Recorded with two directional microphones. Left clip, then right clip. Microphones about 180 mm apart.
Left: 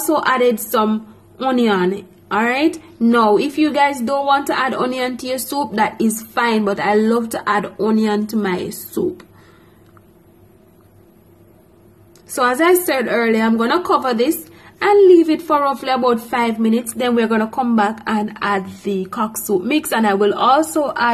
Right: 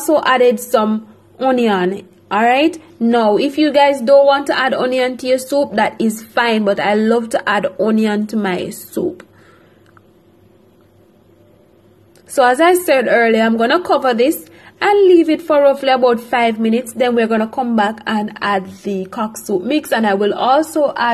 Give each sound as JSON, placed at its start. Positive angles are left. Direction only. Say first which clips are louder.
{"t": 0.2, "sound": "a woman's voice", "louder": "right 3 dB", "side_deg": -15}
{"t": 12.5, "sound": "a woman's voice", "louder": "right 3 dB", "side_deg": -15}